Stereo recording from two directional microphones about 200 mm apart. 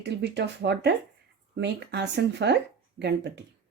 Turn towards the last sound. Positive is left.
turn(degrees=-55)  # may be behind; listen again after turning